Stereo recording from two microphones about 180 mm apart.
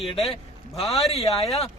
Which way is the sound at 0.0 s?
35° left (ahead or behind).